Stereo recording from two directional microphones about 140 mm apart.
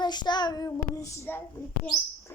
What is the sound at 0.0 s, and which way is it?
Child singing, 30° left (ahead or behind).